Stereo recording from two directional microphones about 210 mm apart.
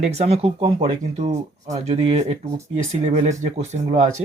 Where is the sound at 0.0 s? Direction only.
30° right (ahead or behind).